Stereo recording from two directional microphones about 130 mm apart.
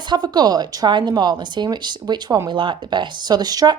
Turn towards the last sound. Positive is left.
turn(degrees=-30)  # may be behind; listen again after turning